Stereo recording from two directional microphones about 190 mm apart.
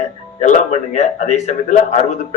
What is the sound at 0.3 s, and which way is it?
A man's voice, 40° left (ahead or behind).